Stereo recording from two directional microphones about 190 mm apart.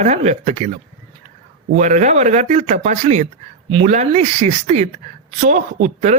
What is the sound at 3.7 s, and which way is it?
Speech, 25° right (ahead or behind).